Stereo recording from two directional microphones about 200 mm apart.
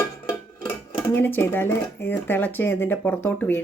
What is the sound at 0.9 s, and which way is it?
Speech, 10° left (ahead or behind).